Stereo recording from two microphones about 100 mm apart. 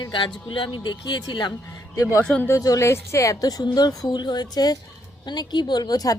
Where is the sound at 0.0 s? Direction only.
55° left (ahead or behind).